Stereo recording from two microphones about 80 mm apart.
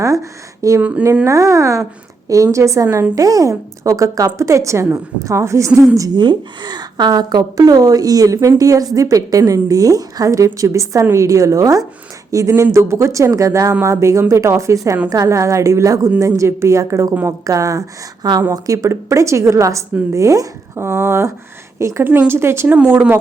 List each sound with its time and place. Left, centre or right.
0.0 s speech: right
0.8 s speech: centre
1.2 s a woman's voice: right
6.1 s a woman's voice: right
22.6 s speech: right